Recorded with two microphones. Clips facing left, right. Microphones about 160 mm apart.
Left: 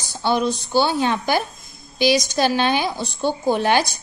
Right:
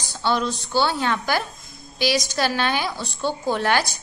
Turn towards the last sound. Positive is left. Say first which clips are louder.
# left 3 dB
turn(degrees=20)  # may be behind; listen again after turning